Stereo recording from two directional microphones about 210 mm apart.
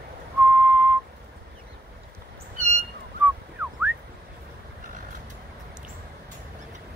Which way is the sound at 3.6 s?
10° right (ahead or behind).